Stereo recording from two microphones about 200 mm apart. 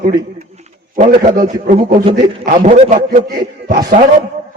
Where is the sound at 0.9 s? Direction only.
40° right (ahead or behind).